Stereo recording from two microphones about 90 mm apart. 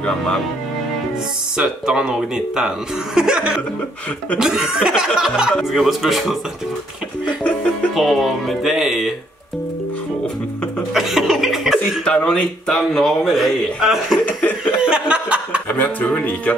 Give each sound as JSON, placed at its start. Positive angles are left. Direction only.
{"t": 1.6, "sound": "speech", "side_deg": -10}
{"t": 7.4, "sound": "speech", "side_deg": 15}
{"t": 7.9, "sound": "speech", "side_deg": 0}
{"t": 10.9, "sound": "chuckle", "side_deg": -5}
{"t": 12.0, "sound": "speech", "side_deg": 10}
{"t": 14.2, "sound": "speech", "side_deg": 15}
{"t": 14.8, "sound": "chuckle", "side_deg": -10}
{"t": 15.7, "sound": "speech", "side_deg": 15}